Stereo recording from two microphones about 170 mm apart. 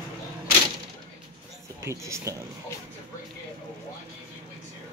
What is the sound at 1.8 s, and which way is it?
Speech, 15° right (ahead or behind).